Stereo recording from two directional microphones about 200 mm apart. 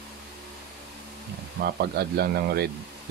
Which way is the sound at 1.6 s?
55° right (ahead or behind).